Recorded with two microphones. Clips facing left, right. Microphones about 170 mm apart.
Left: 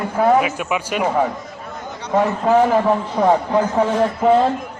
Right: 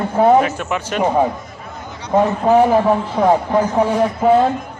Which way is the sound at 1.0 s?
20° right (ahead or behind).